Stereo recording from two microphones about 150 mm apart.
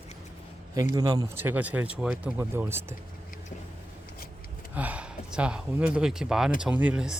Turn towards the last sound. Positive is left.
turn(degrees=-5)  # may be behind; listen again after turning